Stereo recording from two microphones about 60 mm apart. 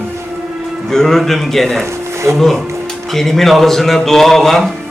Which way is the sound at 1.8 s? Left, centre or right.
Right.